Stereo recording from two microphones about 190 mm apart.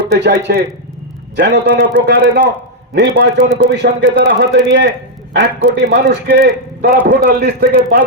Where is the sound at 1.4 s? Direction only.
60° right (ahead or behind).